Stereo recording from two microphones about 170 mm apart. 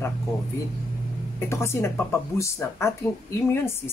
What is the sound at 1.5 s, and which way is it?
Speech, 15° left (ahead or behind).